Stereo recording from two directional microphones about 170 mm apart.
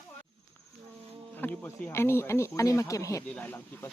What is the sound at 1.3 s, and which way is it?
Speech, 10° left (ahead or behind).